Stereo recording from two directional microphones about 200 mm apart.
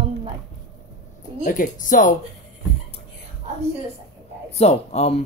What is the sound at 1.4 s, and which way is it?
Speech, 40° left (ahead or behind).